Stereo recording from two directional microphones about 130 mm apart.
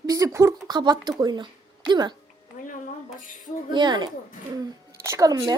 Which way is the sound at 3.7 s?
35° right (ahead or behind).